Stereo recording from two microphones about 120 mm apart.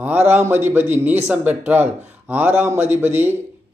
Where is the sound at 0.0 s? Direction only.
15° right (ahead or behind).